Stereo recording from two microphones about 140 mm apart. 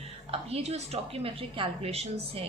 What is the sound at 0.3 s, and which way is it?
A woman's voice, 45° right (ahead or behind).